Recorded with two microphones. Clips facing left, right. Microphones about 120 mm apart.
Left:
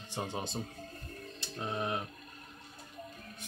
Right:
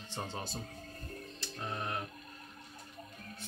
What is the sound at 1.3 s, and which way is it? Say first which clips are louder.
Music: left 4 dB; 20° left (ahead or behind).